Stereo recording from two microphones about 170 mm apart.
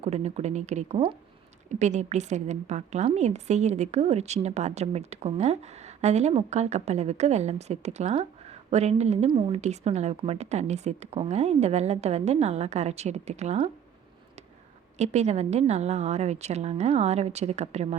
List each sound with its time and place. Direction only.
0.0 s a woman's voice: 40° right (ahead or behind)
14.9 s a woman's voice: 40° right (ahead or behind)